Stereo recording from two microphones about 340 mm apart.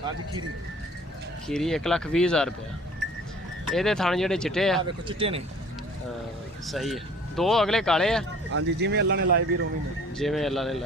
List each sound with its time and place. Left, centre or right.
1.5 s speech: centre
3.7 s speech: centre
4.8 s speech: centre
6.7 s speech: centre
8.5 s speech: right
10.2 s speech: centre